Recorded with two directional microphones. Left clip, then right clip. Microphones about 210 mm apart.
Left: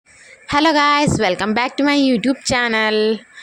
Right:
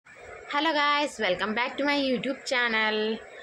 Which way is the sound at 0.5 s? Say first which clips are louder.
Left 10 dB; 50° left (ahead or behind).